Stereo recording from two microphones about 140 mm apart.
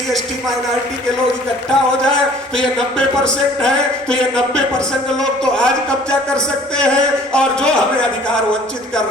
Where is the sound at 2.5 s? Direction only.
5° left (ahead or behind).